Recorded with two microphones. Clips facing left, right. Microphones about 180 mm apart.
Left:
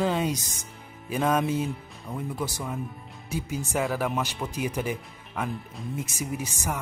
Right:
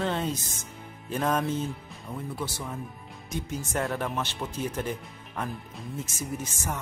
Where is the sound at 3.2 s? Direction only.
10° left (ahead or behind).